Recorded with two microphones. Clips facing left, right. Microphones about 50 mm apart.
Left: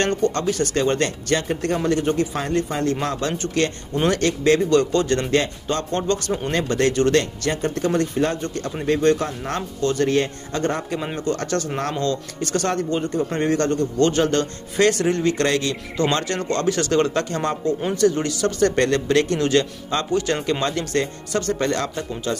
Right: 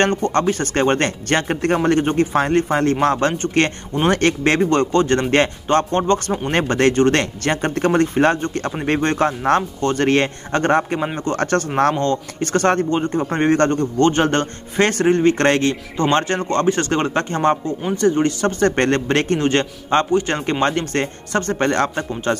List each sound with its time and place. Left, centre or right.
0.0 s a man's voice: right
10.0 s a man's voice: right